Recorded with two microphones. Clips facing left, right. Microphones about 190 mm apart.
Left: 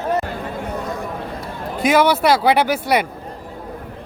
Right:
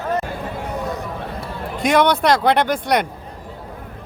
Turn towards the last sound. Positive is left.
turn(degrees=5)  # may be behind; listen again after turning